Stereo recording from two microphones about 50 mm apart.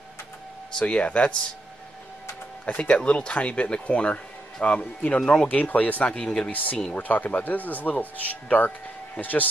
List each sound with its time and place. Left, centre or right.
0.8 s speech: left
2.6 s speech: left
5.6 s speech: left
6.2 s speech: centre
6.5 s speech: left